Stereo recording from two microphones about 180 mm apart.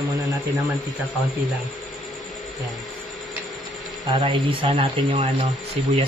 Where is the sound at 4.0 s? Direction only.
25° right (ahead or behind).